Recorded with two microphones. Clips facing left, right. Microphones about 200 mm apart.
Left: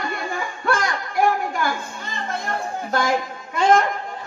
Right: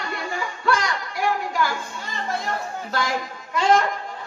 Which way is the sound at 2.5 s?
50° left (ahead or behind).